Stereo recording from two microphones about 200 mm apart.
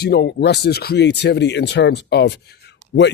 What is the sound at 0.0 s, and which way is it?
Speech, 55° left (ahead or behind).